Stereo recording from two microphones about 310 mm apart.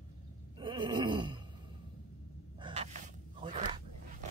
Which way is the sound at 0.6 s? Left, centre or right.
Centre.